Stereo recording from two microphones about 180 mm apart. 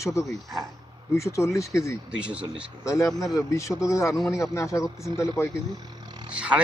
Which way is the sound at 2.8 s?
15° left (ahead or behind).